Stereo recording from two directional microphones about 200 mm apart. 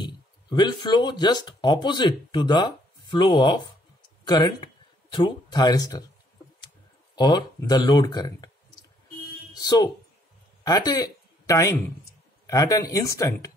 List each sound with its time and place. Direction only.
0.0 s speech: 20° left (ahead or behind)
7.2 s speech: 20° left (ahead or behind)
9.6 s speech: 20° left (ahead or behind)